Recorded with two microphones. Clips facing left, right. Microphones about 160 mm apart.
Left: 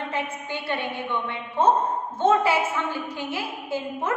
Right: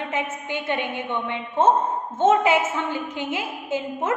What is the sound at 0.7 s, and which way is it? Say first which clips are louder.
A woman's voice: right 1 dB; 15° right (ahead or behind).